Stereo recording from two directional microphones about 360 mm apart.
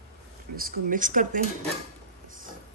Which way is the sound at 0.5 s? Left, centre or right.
Right.